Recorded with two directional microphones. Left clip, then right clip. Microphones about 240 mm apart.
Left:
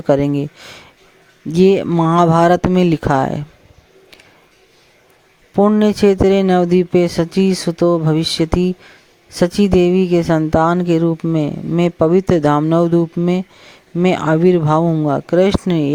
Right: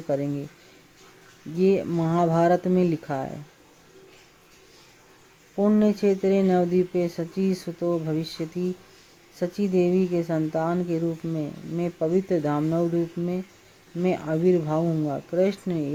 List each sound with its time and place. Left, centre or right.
0.1 s speech: left
1.5 s speech: left
5.5 s speech: left